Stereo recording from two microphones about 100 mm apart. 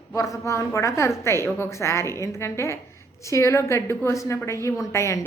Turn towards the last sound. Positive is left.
turn(degrees=30)  # may be behind; listen again after turning